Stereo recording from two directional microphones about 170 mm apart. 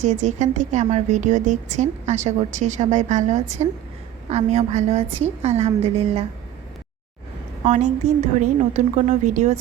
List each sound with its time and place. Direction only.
0.0 s a woman's voice: 45° right (ahead or behind)
7.6 s a woman's voice: 45° right (ahead or behind)